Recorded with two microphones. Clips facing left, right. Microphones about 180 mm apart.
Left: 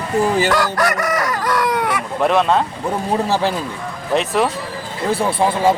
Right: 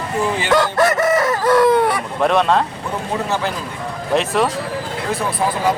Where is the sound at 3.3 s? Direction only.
35° left (ahead or behind).